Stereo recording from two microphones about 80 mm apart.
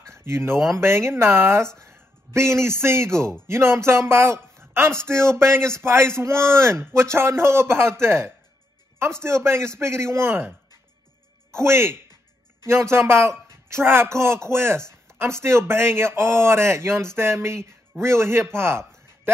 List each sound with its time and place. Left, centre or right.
0.1 s a man's voice: right
11.6 s speech: right